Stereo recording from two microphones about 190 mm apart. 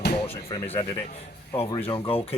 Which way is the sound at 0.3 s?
30° left (ahead or behind).